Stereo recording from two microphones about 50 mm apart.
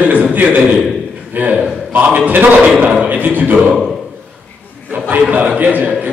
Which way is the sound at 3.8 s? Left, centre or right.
Centre.